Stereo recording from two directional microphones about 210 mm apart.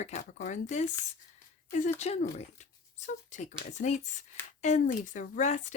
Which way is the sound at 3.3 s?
35° left (ahead or behind).